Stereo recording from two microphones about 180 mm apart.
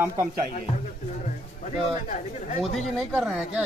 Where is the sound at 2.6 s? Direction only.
Centre (ahead or behind).